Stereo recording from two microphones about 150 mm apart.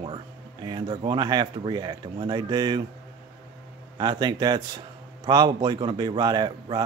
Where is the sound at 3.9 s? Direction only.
30° right (ahead or behind).